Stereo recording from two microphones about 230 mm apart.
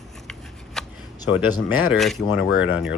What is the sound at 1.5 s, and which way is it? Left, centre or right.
Speech, left.